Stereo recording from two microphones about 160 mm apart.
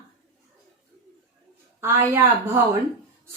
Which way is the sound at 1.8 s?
15° right (ahead or behind).